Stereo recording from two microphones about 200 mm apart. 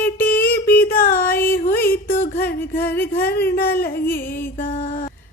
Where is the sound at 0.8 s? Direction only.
50° left (ahead or behind).